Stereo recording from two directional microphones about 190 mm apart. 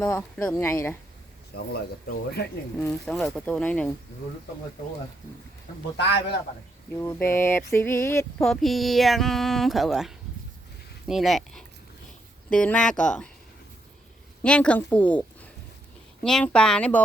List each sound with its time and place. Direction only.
0.0 s speech: 10° left (ahead or behind)
1.5 s speech: 55° left (ahead or behind)
2.7 s speech: 5° left (ahead or behind)
6.0 s speech: 65° left (ahead or behind)
6.9 s speech: 10° left (ahead or behind)
8.4 s speech: centre (ahead or behind)
14.4 s speech: 5° left (ahead or behind)